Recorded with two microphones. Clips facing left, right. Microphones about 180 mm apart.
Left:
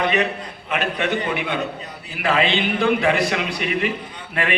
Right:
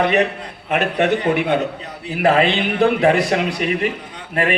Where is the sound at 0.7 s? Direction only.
45° right (ahead or behind).